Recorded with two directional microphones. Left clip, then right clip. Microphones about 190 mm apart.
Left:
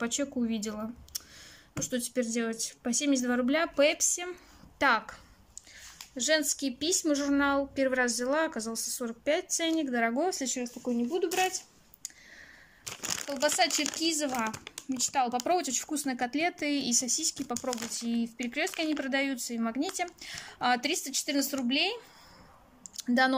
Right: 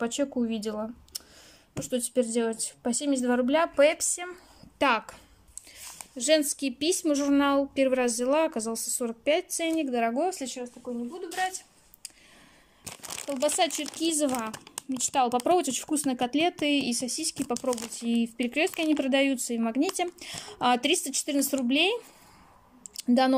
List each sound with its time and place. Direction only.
0.0 s speech: 10° right (ahead or behind); by 11.6 s 5° left (ahead or behind)
12.8 s speech: 20° right (ahead or behind)
22.9 s speech: 10° right (ahead or behind)